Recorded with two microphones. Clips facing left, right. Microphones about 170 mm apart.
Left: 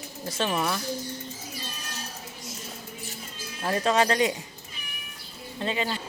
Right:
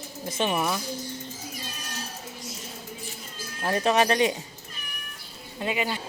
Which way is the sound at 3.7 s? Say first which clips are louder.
Right 1 dB; 20° right (ahead or behind).